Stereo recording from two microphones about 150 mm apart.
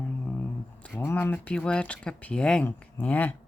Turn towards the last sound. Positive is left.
turn(degrees=10)  # may be behind; listen again after turning